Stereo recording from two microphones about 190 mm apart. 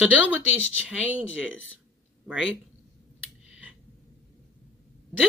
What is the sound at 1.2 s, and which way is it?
Speech, 90° left.